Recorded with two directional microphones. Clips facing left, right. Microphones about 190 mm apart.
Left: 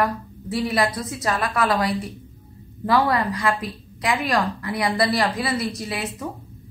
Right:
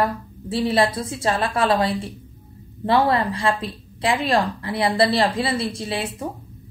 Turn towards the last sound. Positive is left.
turn(degrees=-30)  # may be behind; listen again after turning